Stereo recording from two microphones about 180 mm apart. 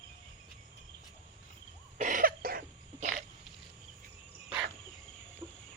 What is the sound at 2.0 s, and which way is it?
Cough, 45° right (ahead or behind).